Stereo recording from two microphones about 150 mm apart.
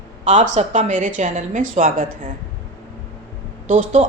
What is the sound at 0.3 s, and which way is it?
Speech, 50° right (ahead or behind).